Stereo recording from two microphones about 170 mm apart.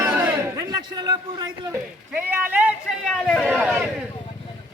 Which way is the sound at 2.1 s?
10° right (ahead or behind).